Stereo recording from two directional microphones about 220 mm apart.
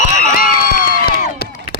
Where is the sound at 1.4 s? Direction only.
45° left (ahead or behind).